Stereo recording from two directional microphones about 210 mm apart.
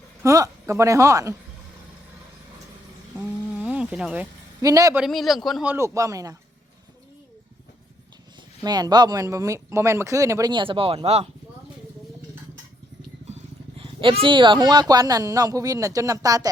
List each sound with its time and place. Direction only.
0.2 s speech: 15° right (ahead or behind)
3.2 s a sound: 5° right (ahead or behind)
5.0 s a man's voice: centre (ahead or behind)
5.7 s speech: 15° right (ahead or behind)
8.6 s speech: 20° right (ahead or behind)
13.2 s speech: 30° right (ahead or behind)